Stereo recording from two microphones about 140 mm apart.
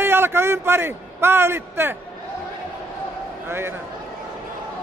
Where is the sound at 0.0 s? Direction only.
15° right (ahead or behind).